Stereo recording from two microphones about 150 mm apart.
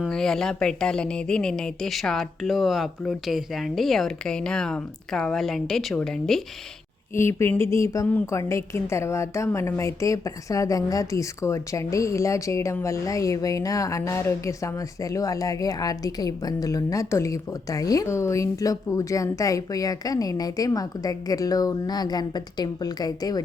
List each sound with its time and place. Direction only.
0.0 s a woman's voice: 5° left (ahead or behind)
7.1 s a woman's voice: 15° left (ahead or behind)